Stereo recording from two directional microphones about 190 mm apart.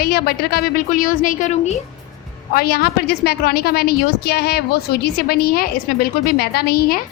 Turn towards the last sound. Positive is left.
turn(degrees=55)  # may be behind; listen again after turning